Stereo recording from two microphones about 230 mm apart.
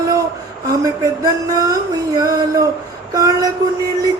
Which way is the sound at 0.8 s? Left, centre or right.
Centre.